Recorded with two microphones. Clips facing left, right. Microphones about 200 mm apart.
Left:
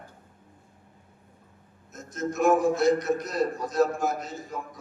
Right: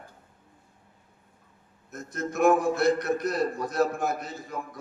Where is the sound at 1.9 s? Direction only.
60° right (ahead or behind).